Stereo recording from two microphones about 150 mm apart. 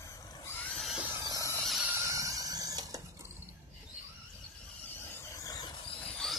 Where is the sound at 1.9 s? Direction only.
20° right (ahead or behind).